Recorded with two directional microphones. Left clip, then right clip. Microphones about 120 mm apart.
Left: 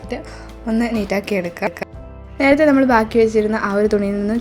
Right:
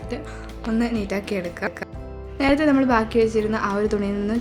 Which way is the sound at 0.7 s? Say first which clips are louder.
Left 5 dB; 35° left (ahead or behind).